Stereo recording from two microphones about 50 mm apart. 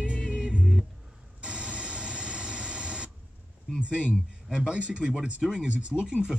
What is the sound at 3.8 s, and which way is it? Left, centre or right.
Speech, right.